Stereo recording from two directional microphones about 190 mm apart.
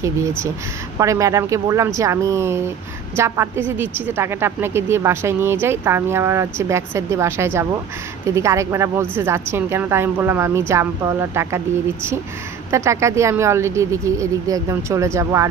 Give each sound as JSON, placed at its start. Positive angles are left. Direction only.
{"t": 0.9, "sound": "a woman's voice", "side_deg": -15}